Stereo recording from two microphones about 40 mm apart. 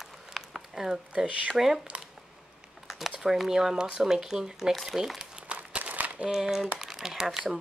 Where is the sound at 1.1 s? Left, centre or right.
Right.